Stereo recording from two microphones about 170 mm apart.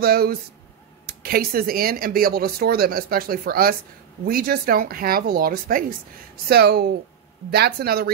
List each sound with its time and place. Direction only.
0.0 s speech: 65° right (ahead or behind)